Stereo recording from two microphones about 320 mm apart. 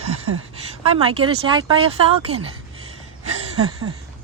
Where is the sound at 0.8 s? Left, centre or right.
Centre.